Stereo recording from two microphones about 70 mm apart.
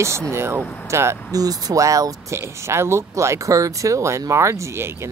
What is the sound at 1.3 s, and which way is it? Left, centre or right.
Speech, right.